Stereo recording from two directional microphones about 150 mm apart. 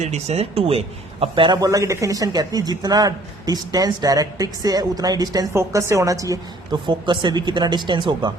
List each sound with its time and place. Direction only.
0.0 s a man's voice: 50° right (ahead or behind); by 8.3 s 30° right (ahead or behind)